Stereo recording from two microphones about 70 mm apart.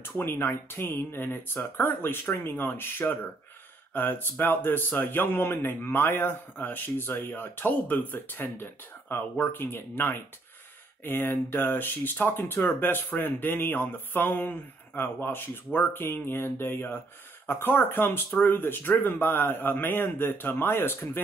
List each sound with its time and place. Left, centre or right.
0.2 s speech: left